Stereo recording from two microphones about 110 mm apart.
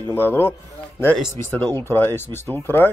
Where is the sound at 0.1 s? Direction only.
20° left (ahead or behind).